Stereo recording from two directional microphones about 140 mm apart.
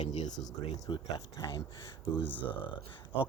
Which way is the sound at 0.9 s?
30° left (ahead or behind).